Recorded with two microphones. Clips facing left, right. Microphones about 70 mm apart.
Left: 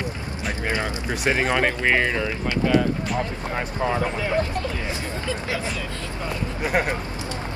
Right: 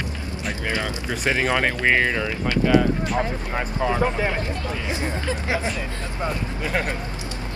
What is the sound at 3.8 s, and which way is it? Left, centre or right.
Speech, centre.